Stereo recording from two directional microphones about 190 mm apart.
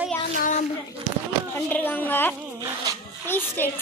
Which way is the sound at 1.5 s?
10° left (ahead or behind).